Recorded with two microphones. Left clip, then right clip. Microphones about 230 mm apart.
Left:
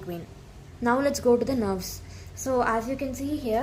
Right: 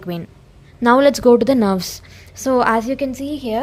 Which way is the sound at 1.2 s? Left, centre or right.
Right.